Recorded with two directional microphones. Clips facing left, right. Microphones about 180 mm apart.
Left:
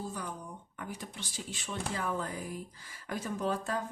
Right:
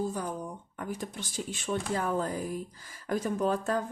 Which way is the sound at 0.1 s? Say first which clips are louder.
Right 6 dB; 45° right (ahead or behind).